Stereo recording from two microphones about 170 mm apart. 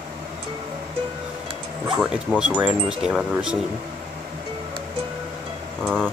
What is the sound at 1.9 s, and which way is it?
Music, 5° right (ahead or behind).